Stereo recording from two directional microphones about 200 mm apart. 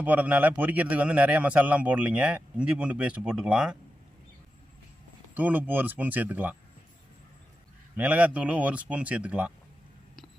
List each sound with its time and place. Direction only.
0.0 s a man's voice: 5° right (ahead or behind)
5.3 s a man's voice: 10° right (ahead or behind)
7.9 s a man's voice: 10° right (ahead or behind)